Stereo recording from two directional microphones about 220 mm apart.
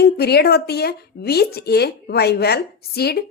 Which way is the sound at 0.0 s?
45° left (ahead or behind).